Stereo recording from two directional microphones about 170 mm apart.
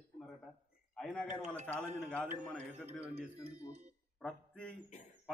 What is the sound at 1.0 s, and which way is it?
Speech, 5° left (ahead or behind).